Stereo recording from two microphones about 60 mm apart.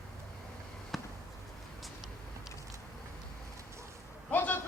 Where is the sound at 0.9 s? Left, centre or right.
Centre.